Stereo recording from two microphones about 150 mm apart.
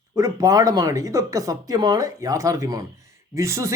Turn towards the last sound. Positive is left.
turn(degrees=-20)  # may be behind; listen again after turning